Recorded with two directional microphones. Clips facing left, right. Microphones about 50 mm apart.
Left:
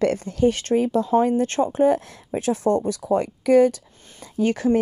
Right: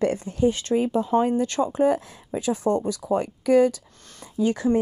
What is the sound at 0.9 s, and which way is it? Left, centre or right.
Speech, left.